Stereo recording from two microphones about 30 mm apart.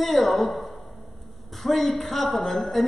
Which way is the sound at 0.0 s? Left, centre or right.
Centre.